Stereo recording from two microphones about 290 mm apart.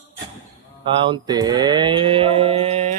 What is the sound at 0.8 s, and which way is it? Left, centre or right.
Mantra, centre.